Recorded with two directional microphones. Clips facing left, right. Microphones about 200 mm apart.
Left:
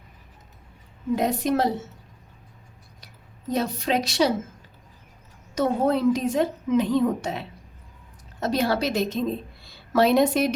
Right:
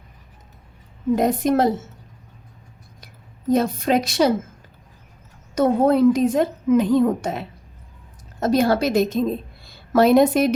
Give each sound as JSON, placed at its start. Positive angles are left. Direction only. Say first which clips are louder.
{"t": 1.1, "sound": "a woman's voice", "louder": "right 4 dB", "side_deg": -50}
{"t": 3.5, "sound": "a woman's voice", "louder": "right 6 dB", "side_deg": -50}
{"t": 5.5, "sound": "a woman's voice", "louder": "right 6 dB", "side_deg": -50}